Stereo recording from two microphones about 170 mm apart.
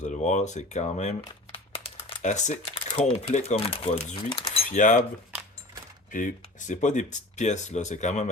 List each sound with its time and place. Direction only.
0.0 s speech: 45° left (ahead or behind)
1.2 s crumpling: 30° left (ahead or behind)
3.3 s speech: 40° left (ahead or behind)
4.3 s a sound: 30° left (ahead or behind)
4.7 s speech: 50° left (ahead or behind)
6.1 s speech: 50° left (ahead or behind)